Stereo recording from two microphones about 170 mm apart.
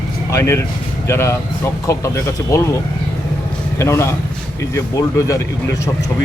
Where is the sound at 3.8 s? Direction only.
15° left (ahead or behind).